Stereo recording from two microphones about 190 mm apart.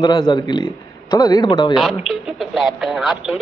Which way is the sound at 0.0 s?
20° left (ahead or behind).